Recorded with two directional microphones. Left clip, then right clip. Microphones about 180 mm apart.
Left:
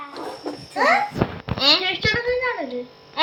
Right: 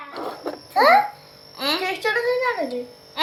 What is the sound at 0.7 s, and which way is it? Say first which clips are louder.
Speech: right 3 dB; centre (ahead or behind).